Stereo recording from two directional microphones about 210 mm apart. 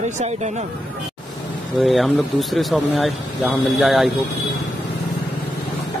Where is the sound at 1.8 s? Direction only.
Centre (ahead or behind).